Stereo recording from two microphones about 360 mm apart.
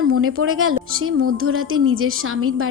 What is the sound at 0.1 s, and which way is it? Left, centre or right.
Speech, right.